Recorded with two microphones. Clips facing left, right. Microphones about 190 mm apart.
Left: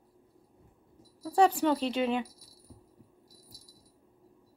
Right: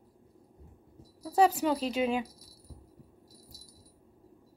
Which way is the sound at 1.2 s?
5° right (ahead or behind).